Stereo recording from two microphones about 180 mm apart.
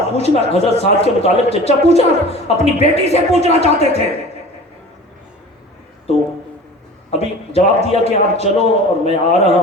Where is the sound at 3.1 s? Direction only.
35° left (ahead or behind).